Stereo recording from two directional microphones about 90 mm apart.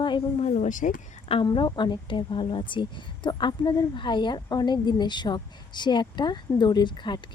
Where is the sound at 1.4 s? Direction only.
60° left (ahead or behind).